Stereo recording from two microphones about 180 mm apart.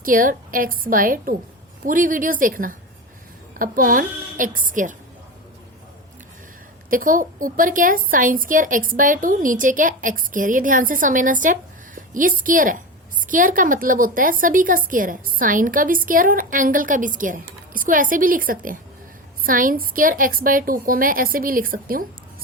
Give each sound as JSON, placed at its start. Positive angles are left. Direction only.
{"t": 0.0, "sound": "a woman's voice", "side_deg": -50}
{"t": 6.9, "sound": "a woman's voice", "side_deg": -50}